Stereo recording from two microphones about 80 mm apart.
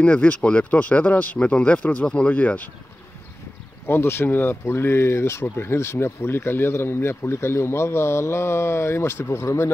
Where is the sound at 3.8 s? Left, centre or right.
Left.